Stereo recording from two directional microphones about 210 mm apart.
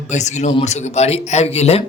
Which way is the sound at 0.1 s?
35° left (ahead or behind).